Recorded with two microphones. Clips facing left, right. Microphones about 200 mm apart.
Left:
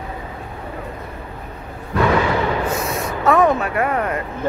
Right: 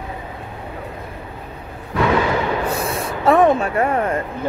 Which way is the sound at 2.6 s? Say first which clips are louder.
Even; 30° right (ahead or behind).